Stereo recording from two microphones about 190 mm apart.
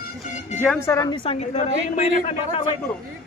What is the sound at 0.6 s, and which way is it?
A woman's voice, 10° left (ahead or behind).